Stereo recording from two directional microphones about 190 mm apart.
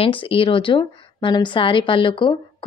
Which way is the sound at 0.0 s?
30° left (ahead or behind).